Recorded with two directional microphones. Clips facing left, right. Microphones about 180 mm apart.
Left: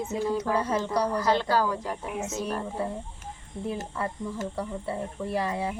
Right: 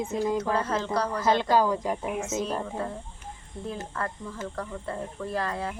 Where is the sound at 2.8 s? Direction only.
10° left (ahead or behind).